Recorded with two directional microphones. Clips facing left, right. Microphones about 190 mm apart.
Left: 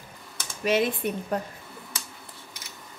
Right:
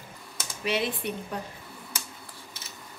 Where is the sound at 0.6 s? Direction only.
45° left (ahead or behind).